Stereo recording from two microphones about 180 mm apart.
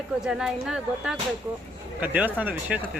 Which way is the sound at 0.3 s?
5° right (ahead or behind).